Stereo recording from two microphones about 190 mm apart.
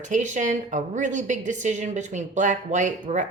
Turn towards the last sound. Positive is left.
turn(degrees=-40)  # may be behind; listen again after turning